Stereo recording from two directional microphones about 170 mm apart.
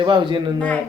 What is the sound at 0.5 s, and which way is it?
Speech, 5° left (ahead or behind).